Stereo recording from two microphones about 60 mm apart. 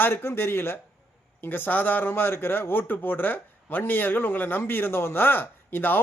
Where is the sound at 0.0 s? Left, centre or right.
Left.